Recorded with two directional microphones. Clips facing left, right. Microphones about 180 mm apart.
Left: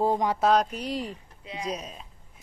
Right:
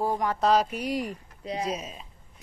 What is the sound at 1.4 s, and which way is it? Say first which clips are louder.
Speech: right 5 dB; 40° right (ahead or behind).